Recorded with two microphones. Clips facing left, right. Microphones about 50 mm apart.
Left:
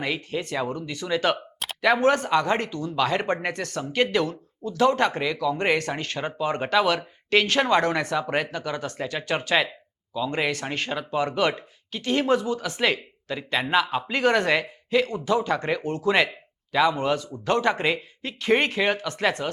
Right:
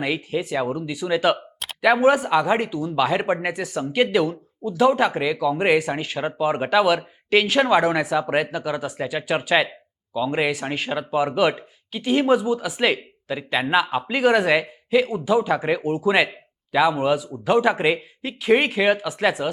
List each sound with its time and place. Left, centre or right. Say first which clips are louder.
0.0 s speech: right 4 dB; centre